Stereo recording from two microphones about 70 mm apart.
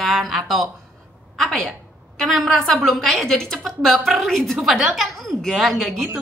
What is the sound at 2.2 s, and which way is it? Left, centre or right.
A woman's voice, centre.